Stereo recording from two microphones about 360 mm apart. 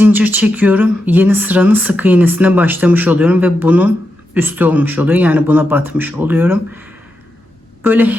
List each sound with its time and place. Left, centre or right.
0.0 s speech: centre
7.9 s speech: centre